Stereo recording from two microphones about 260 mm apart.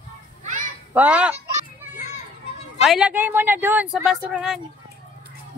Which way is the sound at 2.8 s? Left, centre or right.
Centre.